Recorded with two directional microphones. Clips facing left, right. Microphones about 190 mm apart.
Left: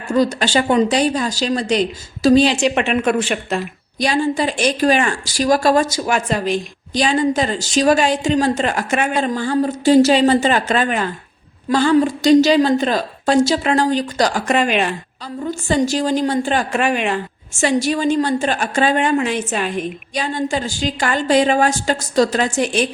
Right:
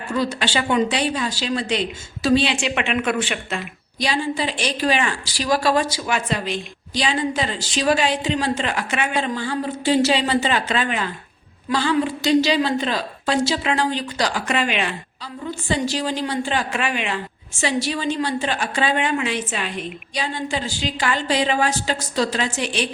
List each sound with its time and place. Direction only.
0.1 s a woman's voice: 45° left (ahead or behind)